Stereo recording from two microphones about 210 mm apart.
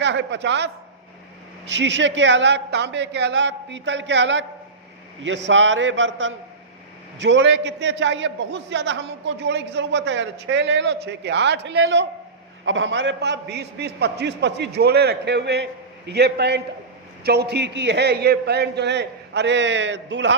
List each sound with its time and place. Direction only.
0.0 s a man's voice: 55° right (ahead or behind)
1.7 s a man's voice: 55° right (ahead or behind)
5.5 s a man's voice: 60° right (ahead or behind)